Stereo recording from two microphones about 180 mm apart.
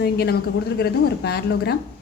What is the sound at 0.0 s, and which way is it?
A woman's voice, 65° left (ahead or behind).